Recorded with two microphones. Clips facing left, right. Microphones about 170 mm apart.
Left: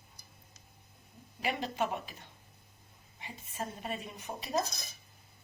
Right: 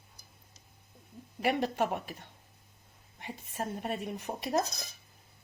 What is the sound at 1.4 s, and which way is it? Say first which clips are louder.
Speech: right 4 dB; 60° right (ahead or behind).